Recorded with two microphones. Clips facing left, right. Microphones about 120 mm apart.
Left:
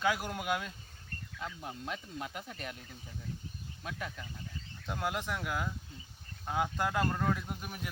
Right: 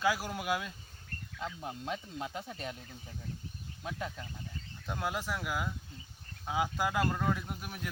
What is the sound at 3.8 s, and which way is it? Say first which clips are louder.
Speech: right 2 dB; 25° right (ahead or behind).